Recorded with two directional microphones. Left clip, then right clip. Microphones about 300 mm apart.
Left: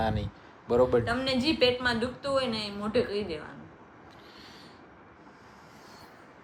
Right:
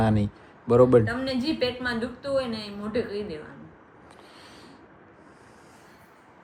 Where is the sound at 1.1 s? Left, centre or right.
Centre.